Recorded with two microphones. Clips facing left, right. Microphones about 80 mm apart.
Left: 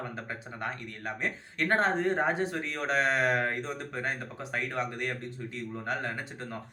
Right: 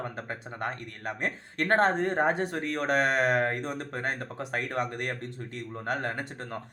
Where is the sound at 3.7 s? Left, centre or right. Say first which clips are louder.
Right 2 dB; right.